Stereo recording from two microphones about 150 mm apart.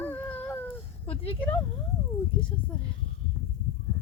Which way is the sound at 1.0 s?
40° left (ahead or behind).